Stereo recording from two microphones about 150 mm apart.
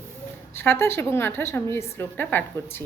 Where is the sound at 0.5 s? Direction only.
15° left (ahead or behind).